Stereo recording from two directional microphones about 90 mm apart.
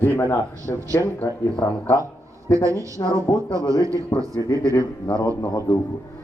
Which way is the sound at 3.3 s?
45° left (ahead or behind).